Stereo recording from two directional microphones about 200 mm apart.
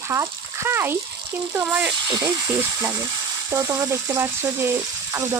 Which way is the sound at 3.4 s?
15° right (ahead or behind).